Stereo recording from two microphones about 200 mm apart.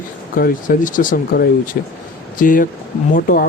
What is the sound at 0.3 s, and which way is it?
Speech, 45° left (ahead or behind).